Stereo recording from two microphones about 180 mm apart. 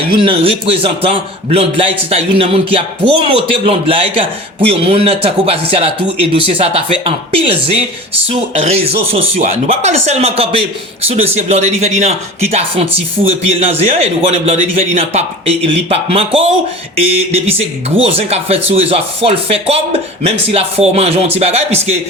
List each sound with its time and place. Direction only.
0.1 s speech: 30° right (ahead or behind)